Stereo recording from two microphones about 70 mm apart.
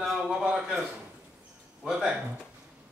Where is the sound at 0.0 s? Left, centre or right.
Centre.